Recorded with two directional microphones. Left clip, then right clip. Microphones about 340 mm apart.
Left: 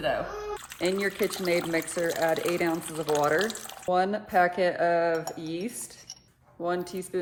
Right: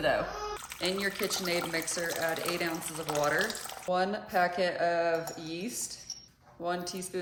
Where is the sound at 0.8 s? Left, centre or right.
Centre.